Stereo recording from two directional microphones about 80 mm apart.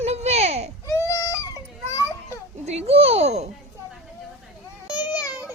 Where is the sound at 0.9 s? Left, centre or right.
Left.